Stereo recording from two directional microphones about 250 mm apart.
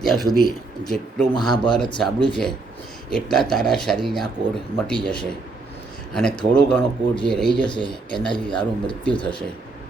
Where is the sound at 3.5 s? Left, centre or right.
Centre.